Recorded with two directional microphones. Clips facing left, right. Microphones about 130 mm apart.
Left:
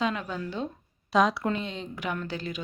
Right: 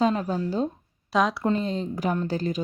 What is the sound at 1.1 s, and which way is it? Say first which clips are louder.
Speech: even; centre (ahead or behind).